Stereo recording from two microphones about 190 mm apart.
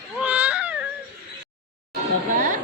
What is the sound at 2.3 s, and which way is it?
Speech, 40° right (ahead or behind).